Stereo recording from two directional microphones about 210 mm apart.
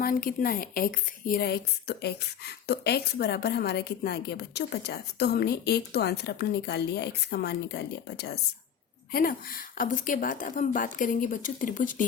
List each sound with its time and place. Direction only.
0.0 s a woman's voice: 45° left (ahead or behind)